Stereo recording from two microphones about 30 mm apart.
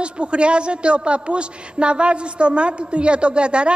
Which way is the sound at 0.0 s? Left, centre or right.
Right.